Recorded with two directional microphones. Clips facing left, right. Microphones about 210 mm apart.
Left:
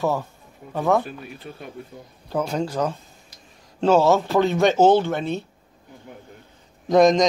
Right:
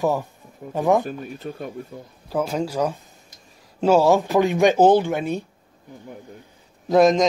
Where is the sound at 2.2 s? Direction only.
5° right (ahead or behind).